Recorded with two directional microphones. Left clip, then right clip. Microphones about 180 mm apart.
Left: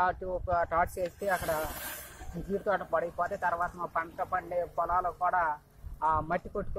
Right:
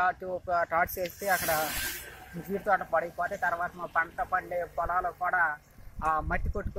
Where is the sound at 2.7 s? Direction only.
10° left (ahead or behind).